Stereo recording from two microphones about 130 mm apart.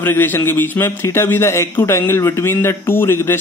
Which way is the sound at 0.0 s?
15° left (ahead or behind).